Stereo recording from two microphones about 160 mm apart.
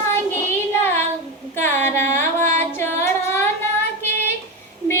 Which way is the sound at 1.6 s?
15° left (ahead or behind).